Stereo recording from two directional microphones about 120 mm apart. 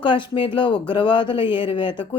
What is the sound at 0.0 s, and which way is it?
A woman's voice, 40° left (ahead or behind).